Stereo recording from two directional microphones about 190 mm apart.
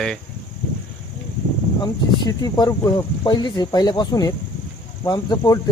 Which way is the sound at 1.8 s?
20° left (ahead or behind).